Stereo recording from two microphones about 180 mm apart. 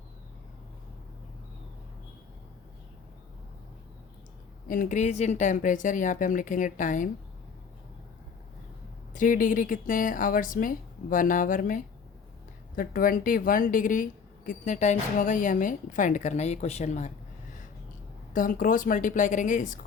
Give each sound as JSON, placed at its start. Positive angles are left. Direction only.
{"t": 4.7, "sound": "a woman's voice", "side_deg": 45}
{"t": 9.1, "sound": "a woman's voice", "side_deg": 45}
{"t": 18.3, "sound": "a woman's voice", "side_deg": 50}